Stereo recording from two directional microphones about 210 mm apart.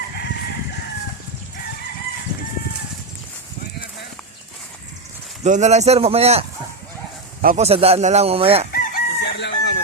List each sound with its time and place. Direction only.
5.4 s speech: 35° right (ahead or behind)
7.4 s speech: 30° right (ahead or behind)
8.7 s chicken: 45° left (ahead or behind)